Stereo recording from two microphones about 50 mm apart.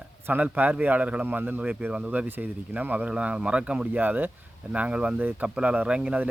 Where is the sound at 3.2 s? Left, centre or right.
Right.